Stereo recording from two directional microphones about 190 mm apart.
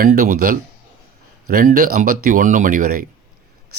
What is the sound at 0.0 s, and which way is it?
Speech, 50° right (ahead or behind).